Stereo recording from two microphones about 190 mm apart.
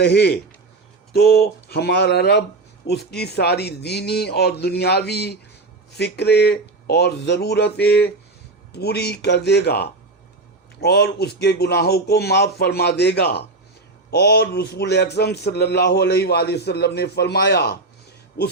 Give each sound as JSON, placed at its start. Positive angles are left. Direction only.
{"t": 0.0, "sound": "a man's voice", "side_deg": 60}